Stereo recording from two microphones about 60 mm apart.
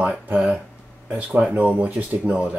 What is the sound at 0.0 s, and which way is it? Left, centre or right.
Speech, centre.